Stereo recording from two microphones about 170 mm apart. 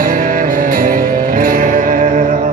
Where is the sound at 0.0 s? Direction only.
55° right (ahead or behind).